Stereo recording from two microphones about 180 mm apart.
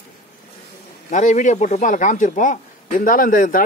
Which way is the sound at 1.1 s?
45° left (ahead or behind).